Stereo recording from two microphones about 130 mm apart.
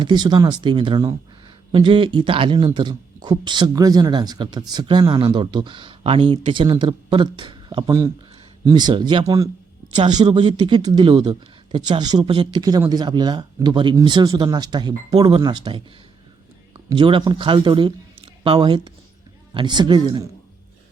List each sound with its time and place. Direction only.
0.0 s speech: 35° right (ahead or behind)
9.2 s speech: 25° right (ahead or behind)